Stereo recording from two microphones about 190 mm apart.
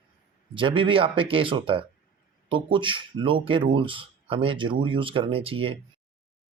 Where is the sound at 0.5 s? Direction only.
25° right (ahead or behind).